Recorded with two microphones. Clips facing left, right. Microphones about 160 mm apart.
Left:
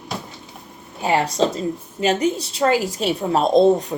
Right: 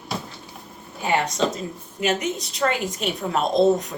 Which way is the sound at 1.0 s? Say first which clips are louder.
Left 3 dB; 30° left (ahead or behind).